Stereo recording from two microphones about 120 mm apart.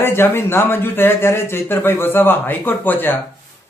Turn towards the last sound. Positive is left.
turn(degrees=15)  # may be behind; listen again after turning